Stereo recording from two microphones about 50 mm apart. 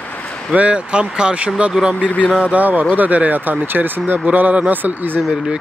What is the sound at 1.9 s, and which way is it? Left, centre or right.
Speech, left.